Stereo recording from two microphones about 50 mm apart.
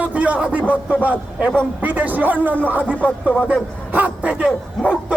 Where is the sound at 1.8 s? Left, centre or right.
Right.